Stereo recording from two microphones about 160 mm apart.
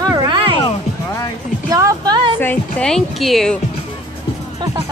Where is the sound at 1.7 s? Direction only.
20° right (ahead or behind).